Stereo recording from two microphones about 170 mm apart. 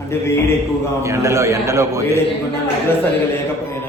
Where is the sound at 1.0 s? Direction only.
15° right (ahead or behind).